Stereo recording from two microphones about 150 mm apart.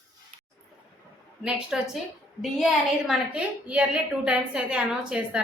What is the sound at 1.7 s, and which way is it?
A woman's voice, 5° right (ahead or behind).